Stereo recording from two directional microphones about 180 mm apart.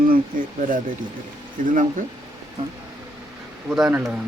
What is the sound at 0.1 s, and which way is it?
Speech, 50° right (ahead or behind).